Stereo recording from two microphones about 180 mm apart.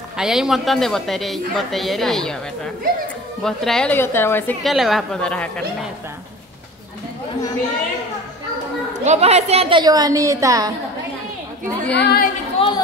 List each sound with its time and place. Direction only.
0.2 s a woman's voice: centre (ahead or behind)
4.6 s a woman's voice: centre (ahead or behind)
9.0 s a woman's voice: 40° right (ahead or behind); by 10.7 s 20° right (ahead or behind)
11.9 s speech: 65° left (ahead or behind)
12.5 s chatter: 25° left (ahead or behind)